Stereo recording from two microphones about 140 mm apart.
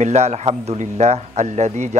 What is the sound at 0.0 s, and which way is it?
A man's voice, 55° right (ahead or behind).